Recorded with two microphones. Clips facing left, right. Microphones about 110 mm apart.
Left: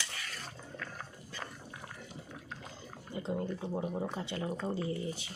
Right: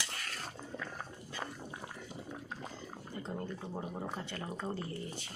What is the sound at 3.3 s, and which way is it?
Speech, 10° left (ahead or behind).